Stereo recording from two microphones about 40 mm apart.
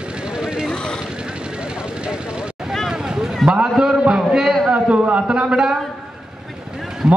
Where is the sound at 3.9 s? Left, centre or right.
Right.